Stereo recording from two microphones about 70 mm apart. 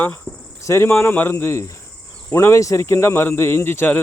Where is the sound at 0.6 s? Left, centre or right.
Left.